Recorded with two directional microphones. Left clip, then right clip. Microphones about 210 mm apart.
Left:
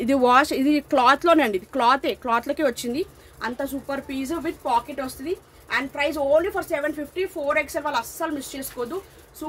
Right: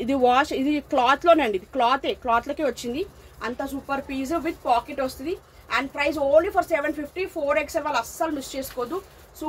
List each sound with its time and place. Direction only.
0.0 s a woman's voice: 25° left (ahead or behind)